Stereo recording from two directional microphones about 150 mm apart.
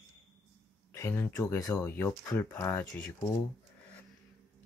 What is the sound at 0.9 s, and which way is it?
Speech, 20° left (ahead or behind).